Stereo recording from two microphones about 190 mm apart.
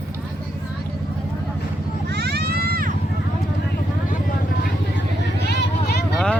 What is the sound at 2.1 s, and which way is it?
Vehicle, 60° right (ahead or behind).